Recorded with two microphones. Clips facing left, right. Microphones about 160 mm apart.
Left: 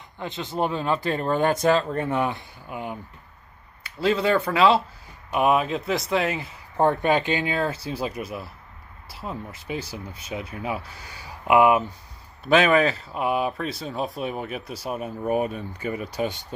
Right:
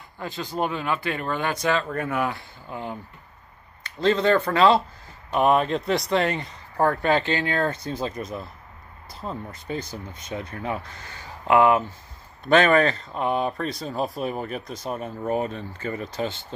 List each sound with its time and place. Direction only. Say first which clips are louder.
0.2 s speech: left 1 dB; 20° left (ahead or behind); by 1.9 s 45° left (ahead or behind)
1.9 s speech: left 1 dB; 25° left (ahead or behind); by 6.6 s 5° left (ahead or behind)
6.8 s speech: left 1 dB; 20° left (ahead or behind)